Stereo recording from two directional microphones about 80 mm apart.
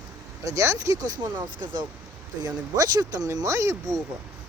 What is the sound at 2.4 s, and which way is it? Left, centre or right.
Speech, right.